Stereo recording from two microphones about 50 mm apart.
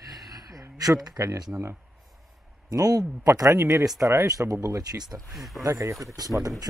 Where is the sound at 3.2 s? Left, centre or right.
Right.